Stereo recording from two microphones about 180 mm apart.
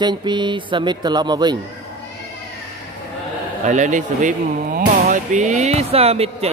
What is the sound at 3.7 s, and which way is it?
A man's voice, 45° right (ahead or behind).